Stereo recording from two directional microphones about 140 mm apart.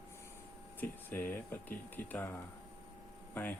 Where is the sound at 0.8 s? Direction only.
15° left (ahead or behind).